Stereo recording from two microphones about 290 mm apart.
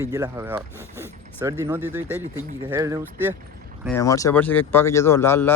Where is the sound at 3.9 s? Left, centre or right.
Centre.